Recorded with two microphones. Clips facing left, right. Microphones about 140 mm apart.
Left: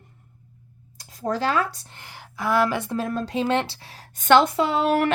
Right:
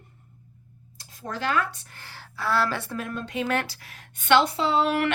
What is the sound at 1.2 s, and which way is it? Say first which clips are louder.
Speech: left 4 dB; 40° left (ahead or behind).